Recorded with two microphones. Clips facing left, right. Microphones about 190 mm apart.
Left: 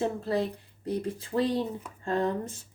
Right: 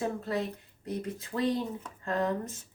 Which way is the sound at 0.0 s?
30° left (ahead or behind).